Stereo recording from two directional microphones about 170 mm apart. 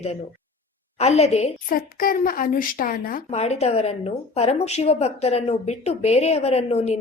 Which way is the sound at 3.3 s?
40° left (ahead or behind).